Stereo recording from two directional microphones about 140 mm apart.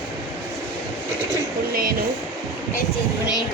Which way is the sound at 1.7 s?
90° right.